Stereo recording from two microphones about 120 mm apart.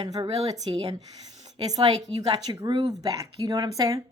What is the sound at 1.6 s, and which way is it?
A woman's voice, 35° right (ahead or behind).